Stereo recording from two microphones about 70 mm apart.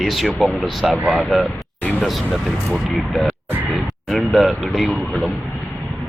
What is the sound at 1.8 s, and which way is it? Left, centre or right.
Speech, left.